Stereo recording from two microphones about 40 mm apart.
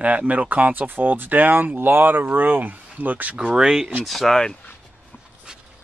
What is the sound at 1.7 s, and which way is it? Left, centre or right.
Speech, right.